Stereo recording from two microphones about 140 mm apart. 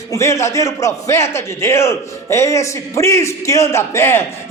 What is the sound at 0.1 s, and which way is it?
A man's voice, 20° left (ahead or behind).